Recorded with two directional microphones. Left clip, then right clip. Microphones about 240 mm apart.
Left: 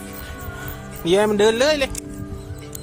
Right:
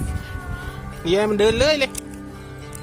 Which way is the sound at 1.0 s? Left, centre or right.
Centre.